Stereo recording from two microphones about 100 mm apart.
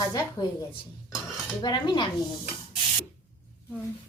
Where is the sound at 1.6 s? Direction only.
50° left (ahead or behind).